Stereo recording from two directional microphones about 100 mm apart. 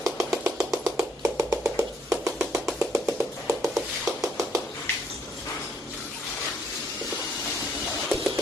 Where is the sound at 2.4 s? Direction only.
5° right (ahead or behind).